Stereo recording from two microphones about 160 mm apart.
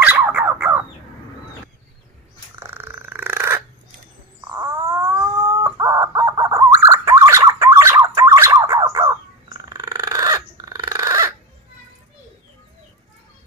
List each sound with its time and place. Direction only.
0.0 s dog: 5° right (ahead or behind)
0.4 s bird: 10° right (ahead or behind)
2.6 s dog: 15° right (ahead or behind)
4.5 s wail: 20° right (ahead or behind)
5.6 s chicken: 20° right (ahead or behind)
6.9 s gargling: 20° right (ahead or behind)